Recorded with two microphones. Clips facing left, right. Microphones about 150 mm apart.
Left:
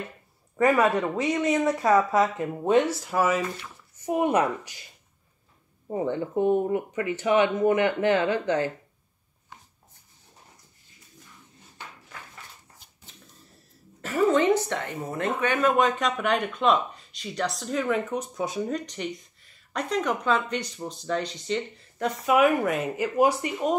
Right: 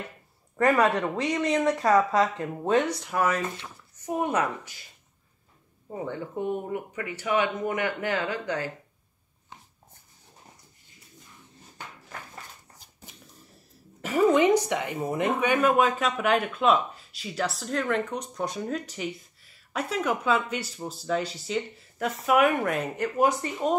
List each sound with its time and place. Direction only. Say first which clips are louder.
0.7 s speech: left 1 dB; centre (ahead or behind)
5.9 s speech: left 6 dB; 25° left (ahead or behind)
14.0 s speech: right 1 dB; 15° right (ahead or behind); by 23.7 s 5° left (ahead or behind)